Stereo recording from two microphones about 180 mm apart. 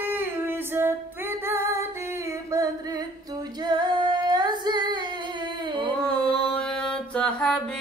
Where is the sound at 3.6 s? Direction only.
25° right (ahead or behind).